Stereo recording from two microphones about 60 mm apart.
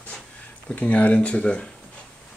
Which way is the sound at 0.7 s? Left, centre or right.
Left.